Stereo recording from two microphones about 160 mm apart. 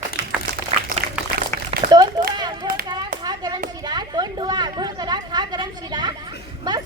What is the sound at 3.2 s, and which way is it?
Hands, 25° right (ahead or behind).